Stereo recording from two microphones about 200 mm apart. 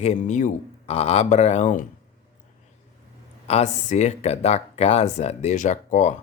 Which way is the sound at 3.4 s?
35° left (ahead or behind).